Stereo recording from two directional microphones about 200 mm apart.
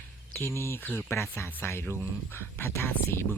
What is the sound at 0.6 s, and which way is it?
Speech, 10° left (ahead or behind).